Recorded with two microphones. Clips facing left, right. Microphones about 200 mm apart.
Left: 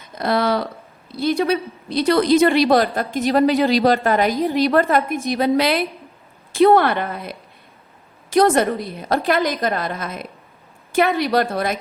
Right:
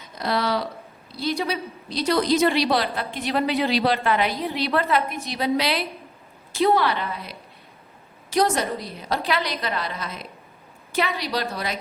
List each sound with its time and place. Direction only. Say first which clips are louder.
0.2 s a woman's voice: left 5 dB; 55° left (ahead or behind)